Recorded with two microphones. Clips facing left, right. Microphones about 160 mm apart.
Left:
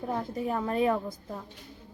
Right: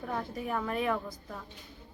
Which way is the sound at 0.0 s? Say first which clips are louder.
Left 4 dB; 25° left (ahead or behind).